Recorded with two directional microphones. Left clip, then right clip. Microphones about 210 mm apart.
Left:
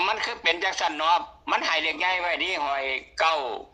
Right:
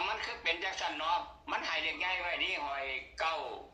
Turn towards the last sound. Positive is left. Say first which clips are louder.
# left 11 dB
turn(degrees=55)  # may be behind; listen again after turning